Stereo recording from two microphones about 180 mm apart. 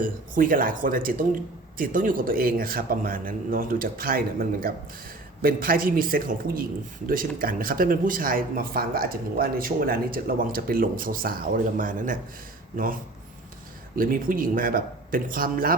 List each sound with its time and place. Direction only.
0.0 s speech: 50° right (ahead or behind)
13.9 s speech: 50° right (ahead or behind)